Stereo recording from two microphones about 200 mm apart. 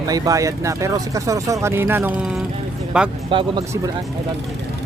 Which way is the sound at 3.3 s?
25° right (ahead or behind).